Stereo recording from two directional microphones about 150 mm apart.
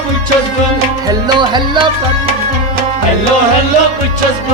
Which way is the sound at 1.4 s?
30° right (ahead or behind).